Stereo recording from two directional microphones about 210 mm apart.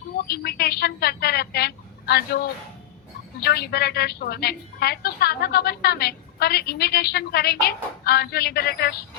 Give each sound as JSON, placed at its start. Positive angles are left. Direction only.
{"t": 0.3, "sound": "a woman's voice", "side_deg": 50}